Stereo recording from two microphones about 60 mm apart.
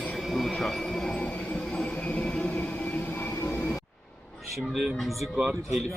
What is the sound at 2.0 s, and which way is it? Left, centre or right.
Vehicle, left.